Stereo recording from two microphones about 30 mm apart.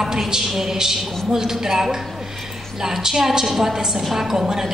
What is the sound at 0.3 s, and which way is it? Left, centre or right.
A woman's voice, centre.